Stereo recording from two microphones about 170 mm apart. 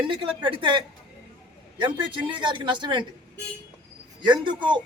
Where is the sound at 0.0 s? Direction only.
30° right (ahead or behind).